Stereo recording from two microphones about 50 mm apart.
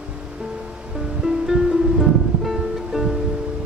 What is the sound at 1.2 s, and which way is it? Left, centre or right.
Music, centre.